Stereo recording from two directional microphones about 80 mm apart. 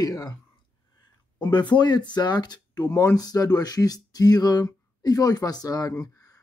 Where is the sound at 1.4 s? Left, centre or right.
Left.